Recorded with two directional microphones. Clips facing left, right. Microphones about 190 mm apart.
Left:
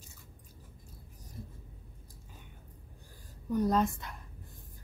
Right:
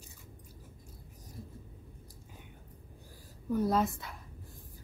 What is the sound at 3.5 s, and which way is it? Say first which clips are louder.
Speech: left 1 dB; 5° right (ahead or behind).